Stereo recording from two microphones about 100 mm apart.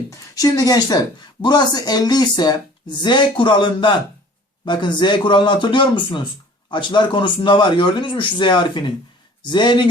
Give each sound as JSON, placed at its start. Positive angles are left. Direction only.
{"t": 0.1, "sound": "speech", "side_deg": 35}